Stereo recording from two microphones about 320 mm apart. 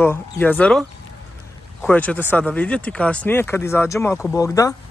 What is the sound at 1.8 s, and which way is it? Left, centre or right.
Speech, centre.